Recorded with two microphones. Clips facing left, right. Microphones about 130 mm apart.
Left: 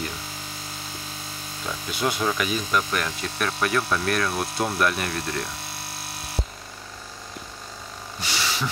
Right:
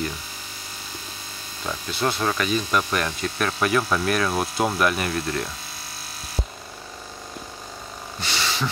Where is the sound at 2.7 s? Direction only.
Centre (ahead or behind).